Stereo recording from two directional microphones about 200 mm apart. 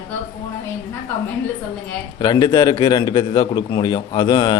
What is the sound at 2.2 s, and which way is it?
A man's voice, 20° left (ahead or behind).